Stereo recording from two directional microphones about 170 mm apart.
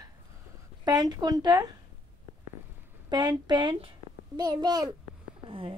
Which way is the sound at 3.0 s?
25° right (ahead or behind).